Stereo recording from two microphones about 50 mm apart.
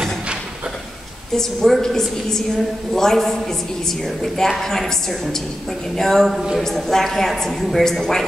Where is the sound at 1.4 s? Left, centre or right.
Centre.